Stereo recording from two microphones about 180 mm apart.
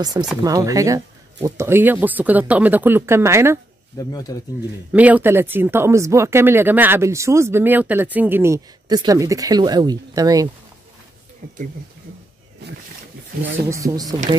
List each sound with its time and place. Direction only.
0.4 s speech: 20° right (ahead or behind)
4.0 s speech: 20° left (ahead or behind)
4.9 s speech: 10° right (ahead or behind)
12.6 s speech: 70° right (ahead or behind)
13.7 s speech: 20° right (ahead or behind)